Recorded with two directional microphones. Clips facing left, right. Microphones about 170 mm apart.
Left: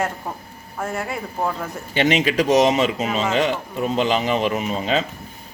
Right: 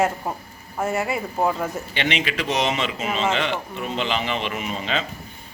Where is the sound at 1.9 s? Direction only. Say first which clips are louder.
Left 11 dB; 40° left (ahead or behind).